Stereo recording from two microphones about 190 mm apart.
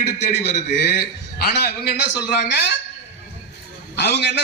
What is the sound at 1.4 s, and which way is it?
A man's voice, 55° left (ahead or behind).